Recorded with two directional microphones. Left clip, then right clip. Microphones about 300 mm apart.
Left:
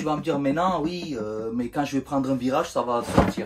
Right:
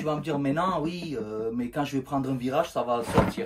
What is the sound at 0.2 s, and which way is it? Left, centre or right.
Speech, centre.